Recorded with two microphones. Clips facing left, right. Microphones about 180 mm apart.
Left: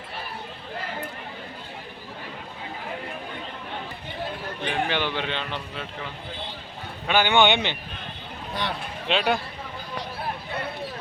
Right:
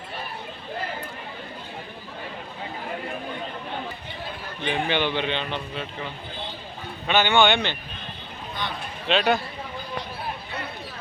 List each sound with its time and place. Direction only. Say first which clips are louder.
4.6 s speech: right 2 dB; centre (ahead or behind)
7.1 s speech: even; 15° left (ahead or behind)
9.0 s speech: right 2 dB; 10° left (ahead or behind)